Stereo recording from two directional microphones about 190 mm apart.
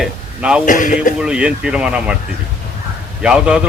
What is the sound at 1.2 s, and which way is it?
Speech, 5° right (ahead or behind).